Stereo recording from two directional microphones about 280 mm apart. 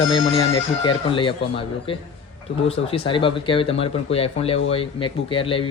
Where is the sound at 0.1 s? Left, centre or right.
Centre.